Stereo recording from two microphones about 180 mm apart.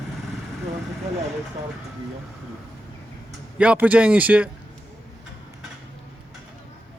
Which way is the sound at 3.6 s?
10° right (ahead or behind).